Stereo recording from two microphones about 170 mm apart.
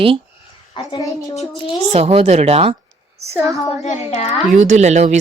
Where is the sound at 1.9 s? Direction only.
35° right (ahead or behind).